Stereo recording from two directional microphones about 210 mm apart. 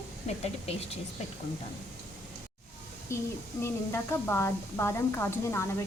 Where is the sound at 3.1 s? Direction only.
15° left (ahead or behind).